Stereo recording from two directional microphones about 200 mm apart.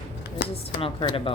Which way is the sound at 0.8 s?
30° left (ahead or behind).